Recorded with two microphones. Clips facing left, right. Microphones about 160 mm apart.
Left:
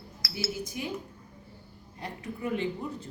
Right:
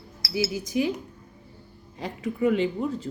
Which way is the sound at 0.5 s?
90° right.